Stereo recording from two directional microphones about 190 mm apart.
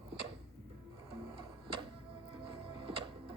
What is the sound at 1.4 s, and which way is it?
Music, 25° right (ahead or behind).